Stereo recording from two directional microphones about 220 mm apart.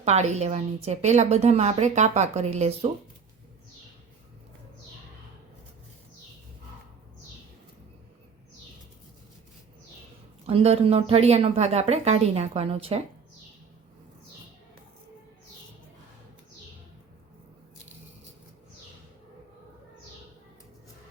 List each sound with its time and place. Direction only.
0.0 s a woman's voice: 30° right (ahead or behind)
10.4 s a woman's voice: 25° right (ahead or behind)